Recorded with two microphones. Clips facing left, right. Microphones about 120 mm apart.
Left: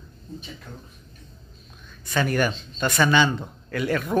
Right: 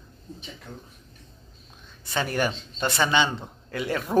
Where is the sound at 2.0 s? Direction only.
25° right (ahead or behind).